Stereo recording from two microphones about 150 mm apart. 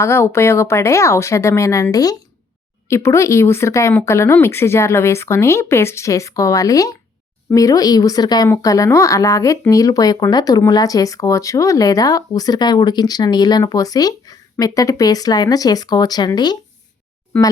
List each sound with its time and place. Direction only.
0.0 s speech: 20° left (ahead or behind)